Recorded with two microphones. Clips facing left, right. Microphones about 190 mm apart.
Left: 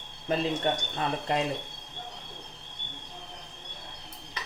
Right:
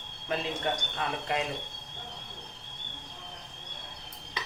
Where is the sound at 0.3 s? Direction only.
35° left (ahead or behind).